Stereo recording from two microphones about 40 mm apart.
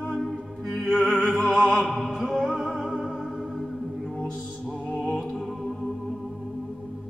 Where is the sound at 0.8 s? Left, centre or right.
Centre.